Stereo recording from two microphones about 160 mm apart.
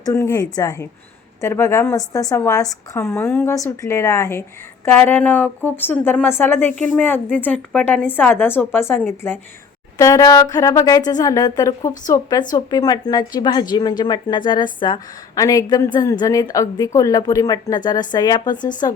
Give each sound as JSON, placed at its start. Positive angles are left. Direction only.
{"t": 0.0, "sound": "a woman's voice", "side_deg": 20}